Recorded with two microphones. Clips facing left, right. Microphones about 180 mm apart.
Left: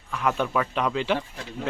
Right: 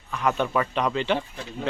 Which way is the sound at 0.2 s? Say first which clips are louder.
Right 1 dB; centre (ahead or behind).